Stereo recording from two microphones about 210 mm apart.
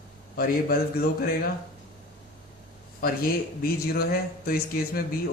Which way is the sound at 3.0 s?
45° left (ahead or behind).